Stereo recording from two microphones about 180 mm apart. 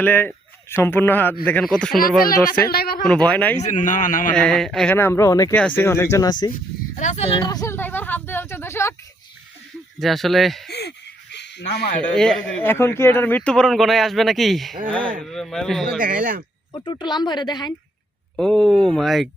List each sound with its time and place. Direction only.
0.0 s speech: 10° left (ahead or behind)
2.0 s a man's voice: 55° left (ahead or behind)
3.2 s speech: 10° left (ahead or behind)
3.6 s a man's voice: 40° left (ahead or behind)
4.4 s speech: 5° left (ahead or behind)
6.5 s speech: 45° left (ahead or behind)
7.4 s speech: 20° left (ahead or behind)
10.0 s speech: centre (ahead or behind)
10.7 s a sound: 65° left (ahead or behind)
12.1 s speech: 5° left (ahead or behind)
16.0 s speech: 50° right (ahead or behind)
16.7 s speech: 25° left (ahead or behind)
18.3 s speech: 5° left (ahead or behind)